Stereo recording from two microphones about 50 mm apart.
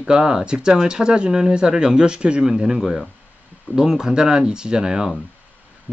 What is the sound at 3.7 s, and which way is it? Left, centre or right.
Speech, centre.